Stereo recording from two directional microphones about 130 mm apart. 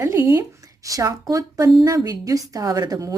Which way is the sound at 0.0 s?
20° right (ahead or behind).